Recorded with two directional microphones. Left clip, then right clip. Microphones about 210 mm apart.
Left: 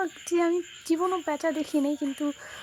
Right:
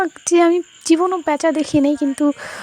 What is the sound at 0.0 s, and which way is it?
Speech, 45° right (ahead or behind).